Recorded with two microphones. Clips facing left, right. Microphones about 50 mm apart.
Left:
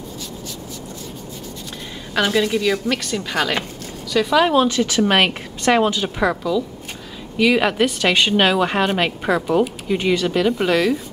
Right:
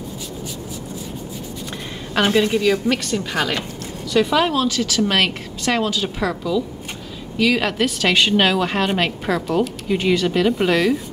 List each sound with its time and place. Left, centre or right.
2.2 s a woman's voice: centre
4.5 s a woman's voice: centre